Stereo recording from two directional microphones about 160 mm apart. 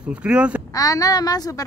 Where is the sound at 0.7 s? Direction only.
20° left (ahead or behind).